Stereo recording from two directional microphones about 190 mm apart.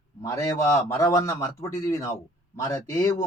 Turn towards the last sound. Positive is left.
turn(degrees=20)  # may be behind; listen again after turning